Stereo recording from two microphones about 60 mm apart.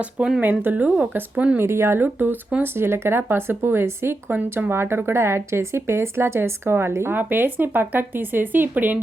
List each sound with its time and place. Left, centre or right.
0.0 s speech: centre
0.4 s speech: right
1.5 s speech: right
2.1 s speech: right
2.7 s speech: right